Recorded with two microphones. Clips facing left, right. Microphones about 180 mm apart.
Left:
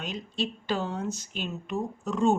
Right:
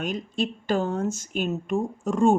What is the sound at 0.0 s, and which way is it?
Speech, 50° right (ahead or behind).